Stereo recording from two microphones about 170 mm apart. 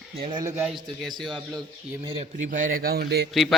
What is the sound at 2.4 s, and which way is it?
Speech, 50° right (ahead or behind).